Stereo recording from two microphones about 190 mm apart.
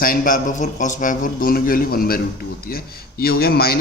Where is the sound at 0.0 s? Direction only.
45° left (ahead or behind).